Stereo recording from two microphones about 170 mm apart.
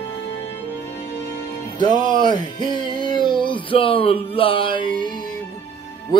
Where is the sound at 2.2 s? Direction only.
25° left (ahead or behind).